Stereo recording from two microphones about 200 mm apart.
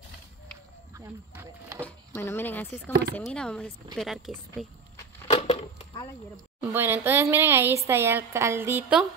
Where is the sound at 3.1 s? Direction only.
5° left (ahead or behind).